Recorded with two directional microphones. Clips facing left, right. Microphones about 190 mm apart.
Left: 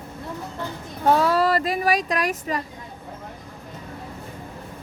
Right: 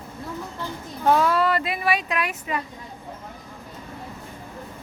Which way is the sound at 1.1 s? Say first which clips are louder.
Left 1 dB; 35° left (ahead or behind).